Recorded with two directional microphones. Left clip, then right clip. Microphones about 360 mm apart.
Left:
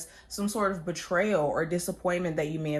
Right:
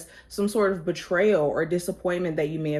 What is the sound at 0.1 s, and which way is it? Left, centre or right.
Speech, centre.